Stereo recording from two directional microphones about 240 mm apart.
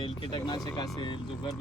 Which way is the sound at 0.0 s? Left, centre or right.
Centre.